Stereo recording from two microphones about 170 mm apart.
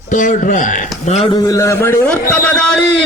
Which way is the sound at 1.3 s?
20° left (ahead or behind).